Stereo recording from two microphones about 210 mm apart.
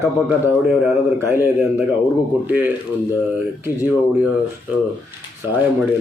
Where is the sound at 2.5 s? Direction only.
10° right (ahead or behind).